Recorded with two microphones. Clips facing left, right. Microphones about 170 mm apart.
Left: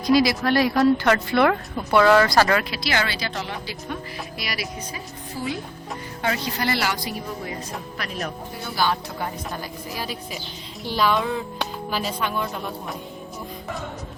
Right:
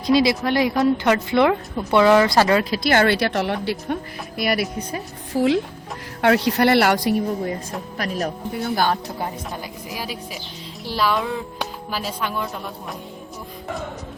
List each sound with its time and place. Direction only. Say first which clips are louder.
0.0 s speech: right 1 dB; 25° right (ahead or behind)
2.6 s a woman's voice: right 8 dB; 45° right (ahead or behind)
7.9 s speech: right 7 dB; 40° right (ahead or behind)
8.6 s speech: right 3 dB; 50° right (ahead or behind)
9.1 s speech: right 1 dB; 25° right (ahead or behind)
9.9 s speech: right 1 dB; 10° right (ahead or behind)